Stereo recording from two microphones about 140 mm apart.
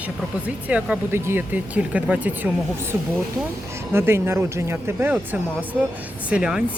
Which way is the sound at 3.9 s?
15° right (ahead or behind).